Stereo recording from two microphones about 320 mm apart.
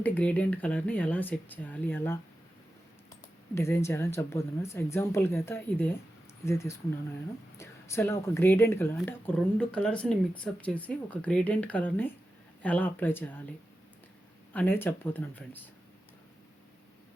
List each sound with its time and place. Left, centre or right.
0.0 s speech: centre
3.5 s speech: centre
14.5 s speech: centre